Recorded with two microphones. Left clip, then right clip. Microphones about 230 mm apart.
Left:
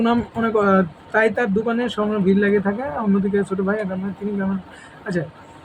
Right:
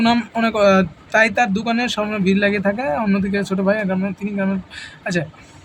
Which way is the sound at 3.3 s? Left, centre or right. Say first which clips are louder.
Right 2 dB; right.